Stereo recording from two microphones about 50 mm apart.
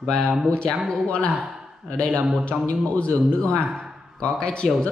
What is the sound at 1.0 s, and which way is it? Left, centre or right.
Speech, left.